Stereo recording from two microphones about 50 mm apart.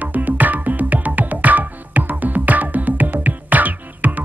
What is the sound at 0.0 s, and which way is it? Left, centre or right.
Music, right.